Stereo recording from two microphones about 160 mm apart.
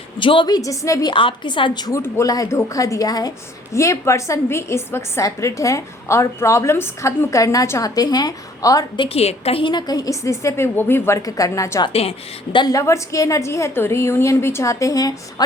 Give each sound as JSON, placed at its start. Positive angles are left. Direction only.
{"t": 0.2, "sound": "a woman's voice", "side_deg": 30}
{"t": 1.1, "sound": "a woman's voice", "side_deg": 30}
{"t": 9.0, "sound": "a woman's voice", "side_deg": 40}